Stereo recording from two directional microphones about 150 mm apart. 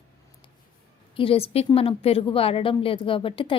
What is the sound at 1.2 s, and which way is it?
A woman's voice, 40° left (ahead or behind).